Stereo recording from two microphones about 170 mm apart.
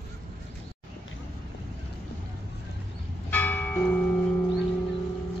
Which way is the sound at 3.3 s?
10° left (ahead or behind).